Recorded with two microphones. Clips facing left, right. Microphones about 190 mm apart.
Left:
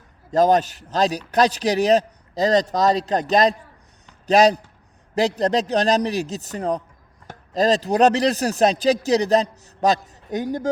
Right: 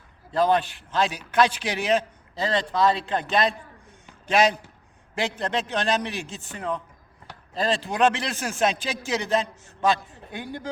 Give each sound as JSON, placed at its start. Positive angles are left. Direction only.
{"t": 0.3, "sound": "speech", "side_deg": 40}